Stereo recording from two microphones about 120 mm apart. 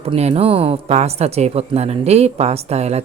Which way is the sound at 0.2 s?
60° right (ahead or behind).